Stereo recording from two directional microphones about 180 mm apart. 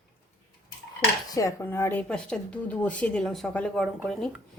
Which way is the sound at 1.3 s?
20° left (ahead or behind).